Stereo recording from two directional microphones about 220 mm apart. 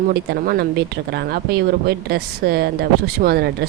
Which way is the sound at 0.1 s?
45° right (ahead or behind).